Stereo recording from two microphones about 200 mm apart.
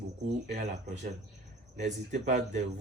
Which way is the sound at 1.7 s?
35° right (ahead or behind).